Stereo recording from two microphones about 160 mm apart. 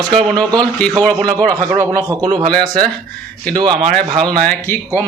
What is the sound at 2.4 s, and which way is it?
Speech, 5° left (ahead or behind).